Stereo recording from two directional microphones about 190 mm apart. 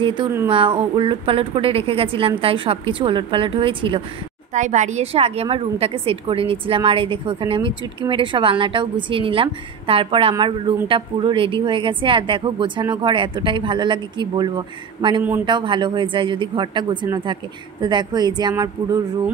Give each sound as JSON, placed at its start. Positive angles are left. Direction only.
{"t": 0.0, "sound": "a woman's voice", "side_deg": -25}
{"t": 4.6, "sound": "a woman's voice", "side_deg": -40}